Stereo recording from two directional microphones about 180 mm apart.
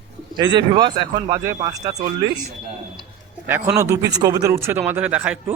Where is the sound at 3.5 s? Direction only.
15° right (ahead or behind).